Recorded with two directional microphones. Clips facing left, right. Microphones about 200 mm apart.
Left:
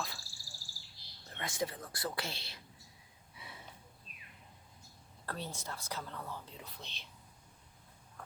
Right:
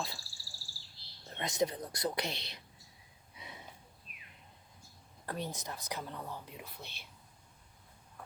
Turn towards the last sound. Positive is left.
turn(degrees=-10)  # may be behind; listen again after turning